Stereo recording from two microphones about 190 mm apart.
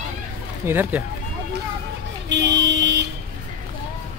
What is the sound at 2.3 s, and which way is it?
Vehicle, 70° right (ahead or behind).